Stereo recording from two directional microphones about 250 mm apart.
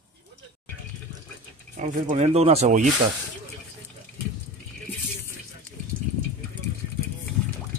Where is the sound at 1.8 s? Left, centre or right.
Right.